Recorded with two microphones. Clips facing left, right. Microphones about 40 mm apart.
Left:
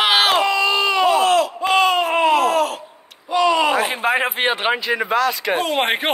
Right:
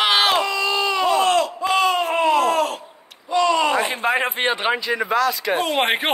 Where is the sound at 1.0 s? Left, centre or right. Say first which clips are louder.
Left 1 dB; centre.